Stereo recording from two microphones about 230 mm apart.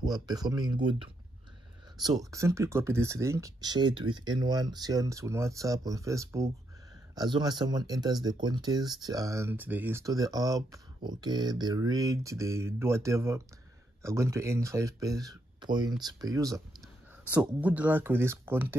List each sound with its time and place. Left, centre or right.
0.0 s speech: centre
2.0 s speech: centre